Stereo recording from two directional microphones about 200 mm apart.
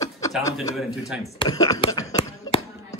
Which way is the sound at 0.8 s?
Centre (ahead or behind).